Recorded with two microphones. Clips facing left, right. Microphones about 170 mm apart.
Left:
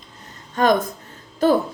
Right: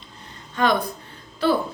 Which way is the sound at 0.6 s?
45° left (ahead or behind).